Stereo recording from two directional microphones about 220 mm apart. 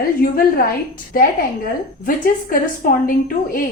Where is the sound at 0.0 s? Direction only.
40° left (ahead or behind).